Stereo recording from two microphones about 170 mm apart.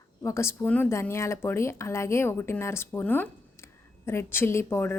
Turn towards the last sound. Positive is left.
turn(degrees=10)  # may be behind; listen again after turning